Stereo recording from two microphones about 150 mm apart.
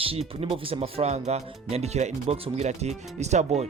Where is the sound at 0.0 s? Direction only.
40° right (ahead or behind).